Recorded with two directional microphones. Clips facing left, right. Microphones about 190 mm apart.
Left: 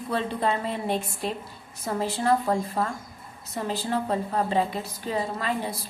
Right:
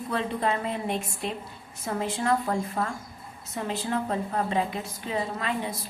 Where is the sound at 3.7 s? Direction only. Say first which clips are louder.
Left 2 dB; 35° left (ahead or behind).